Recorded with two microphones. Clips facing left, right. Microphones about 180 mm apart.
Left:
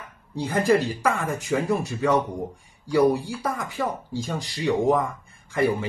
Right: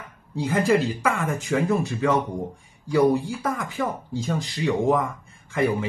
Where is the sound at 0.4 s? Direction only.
Centre (ahead or behind).